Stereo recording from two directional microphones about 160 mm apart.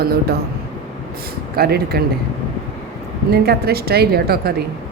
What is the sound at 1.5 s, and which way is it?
Speech, 75° right (ahead or behind).